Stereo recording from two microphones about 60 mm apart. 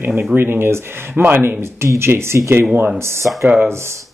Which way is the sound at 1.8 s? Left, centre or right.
Right.